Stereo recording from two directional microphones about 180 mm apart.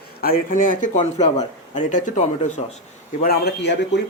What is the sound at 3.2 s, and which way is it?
Speech, 60° left (ahead or behind).